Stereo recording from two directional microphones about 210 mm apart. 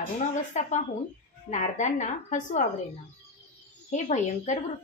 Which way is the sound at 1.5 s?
35° left (ahead or behind).